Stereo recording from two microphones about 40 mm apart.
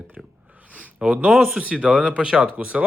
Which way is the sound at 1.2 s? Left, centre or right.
Centre.